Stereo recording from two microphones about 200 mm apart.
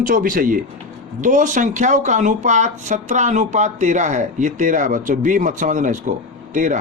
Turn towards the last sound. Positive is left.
turn(degrees=-40)  # may be behind; listen again after turning